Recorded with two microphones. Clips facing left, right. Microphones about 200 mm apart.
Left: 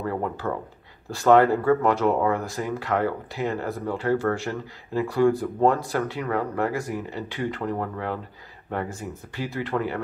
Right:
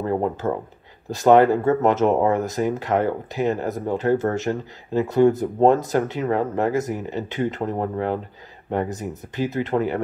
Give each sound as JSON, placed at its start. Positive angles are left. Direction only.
{"t": 0.0, "sound": "speech", "side_deg": -25}